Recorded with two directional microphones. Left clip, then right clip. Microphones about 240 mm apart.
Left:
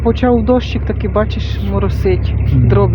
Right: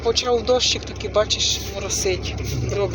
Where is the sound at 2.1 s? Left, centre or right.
Left.